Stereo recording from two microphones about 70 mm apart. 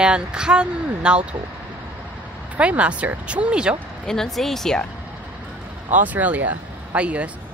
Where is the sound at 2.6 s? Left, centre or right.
Centre.